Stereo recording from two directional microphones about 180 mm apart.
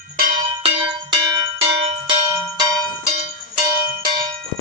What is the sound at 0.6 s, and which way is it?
Bell, 30° right (ahead or behind).